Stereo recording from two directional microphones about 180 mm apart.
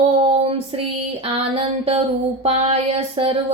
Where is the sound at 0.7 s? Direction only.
35° right (ahead or behind).